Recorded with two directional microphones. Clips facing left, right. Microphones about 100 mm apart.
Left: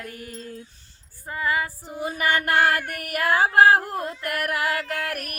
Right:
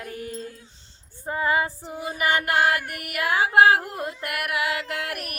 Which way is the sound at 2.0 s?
40° left (ahead or behind).